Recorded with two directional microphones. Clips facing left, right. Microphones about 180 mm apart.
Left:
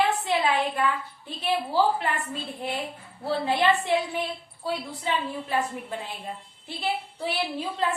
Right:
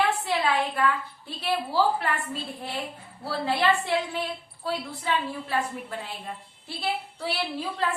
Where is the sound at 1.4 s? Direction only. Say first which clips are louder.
Left 1 dB; 15° left (ahead or behind).